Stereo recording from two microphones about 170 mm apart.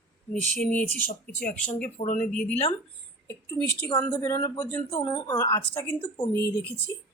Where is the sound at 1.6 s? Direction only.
5° left (ahead or behind).